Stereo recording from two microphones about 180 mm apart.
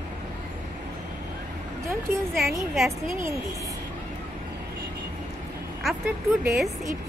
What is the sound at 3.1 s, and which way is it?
Speech, 15° right (ahead or behind).